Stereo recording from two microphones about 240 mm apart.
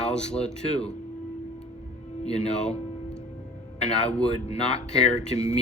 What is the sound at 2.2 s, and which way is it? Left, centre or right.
Speech, left.